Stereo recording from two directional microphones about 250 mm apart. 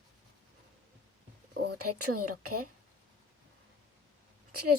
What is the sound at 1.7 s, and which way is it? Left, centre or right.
Speech, right.